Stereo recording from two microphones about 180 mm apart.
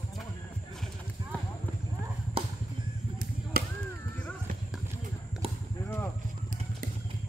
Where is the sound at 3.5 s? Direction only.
55° right (ahead or behind).